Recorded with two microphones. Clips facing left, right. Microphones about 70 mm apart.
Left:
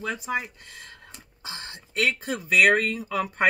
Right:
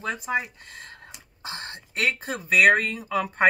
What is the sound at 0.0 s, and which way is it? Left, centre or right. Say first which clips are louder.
Speech: right 1 dB; right.